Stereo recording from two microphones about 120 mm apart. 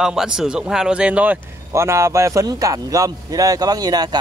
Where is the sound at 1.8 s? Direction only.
25° right (ahead or behind).